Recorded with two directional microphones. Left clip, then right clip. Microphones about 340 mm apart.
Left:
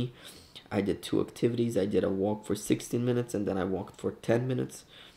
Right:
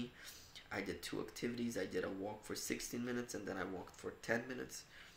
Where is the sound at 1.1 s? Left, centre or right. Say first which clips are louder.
Left 15 dB; right.